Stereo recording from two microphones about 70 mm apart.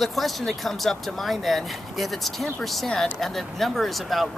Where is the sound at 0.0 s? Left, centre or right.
Centre.